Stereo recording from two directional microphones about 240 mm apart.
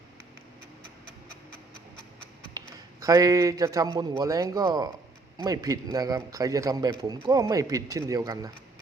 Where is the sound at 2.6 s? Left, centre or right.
Centre.